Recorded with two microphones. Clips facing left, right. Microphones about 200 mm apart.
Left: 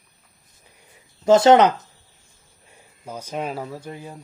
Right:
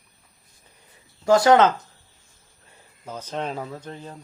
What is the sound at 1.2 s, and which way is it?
Speech, 25° left (ahead or behind).